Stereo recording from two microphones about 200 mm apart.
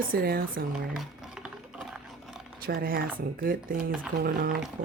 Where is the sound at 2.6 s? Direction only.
50° right (ahead or behind).